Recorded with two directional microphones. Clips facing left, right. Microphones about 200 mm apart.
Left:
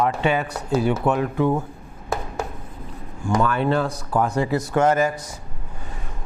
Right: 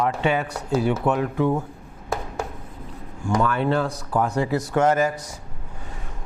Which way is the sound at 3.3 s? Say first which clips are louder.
Left 1 dB; 15° left (ahead or behind).